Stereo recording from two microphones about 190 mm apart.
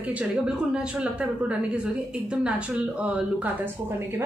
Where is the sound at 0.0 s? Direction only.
5° right (ahead or behind).